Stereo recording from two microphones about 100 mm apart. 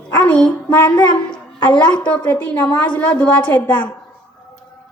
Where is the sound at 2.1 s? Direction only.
15° left (ahead or behind).